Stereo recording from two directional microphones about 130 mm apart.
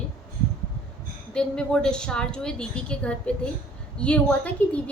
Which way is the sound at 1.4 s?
5° left (ahead or behind).